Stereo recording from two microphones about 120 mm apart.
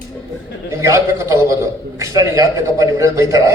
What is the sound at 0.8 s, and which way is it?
A man's voice, 25° right (ahead or behind).